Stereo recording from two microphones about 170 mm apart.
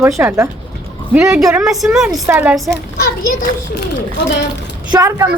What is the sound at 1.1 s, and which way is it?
A woman's voice, 5° right (ahead or behind).